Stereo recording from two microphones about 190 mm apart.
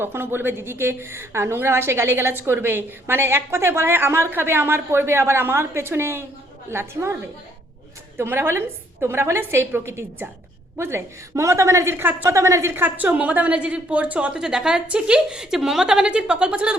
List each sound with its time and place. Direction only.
0.0 s a woman's voice: 10° right (ahead or behind)
8.2 s a woman's voice: 10° right (ahead or behind)